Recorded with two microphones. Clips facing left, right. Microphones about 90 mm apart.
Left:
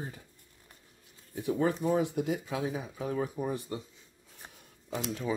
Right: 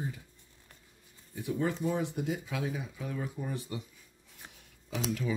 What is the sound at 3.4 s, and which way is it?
Speech, 65° left (ahead or behind).